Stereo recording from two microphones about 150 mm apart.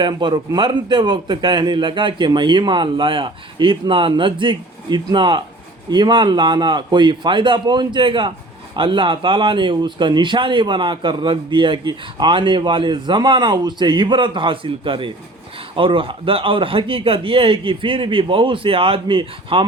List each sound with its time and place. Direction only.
0.0 s speech: 30° right (ahead or behind)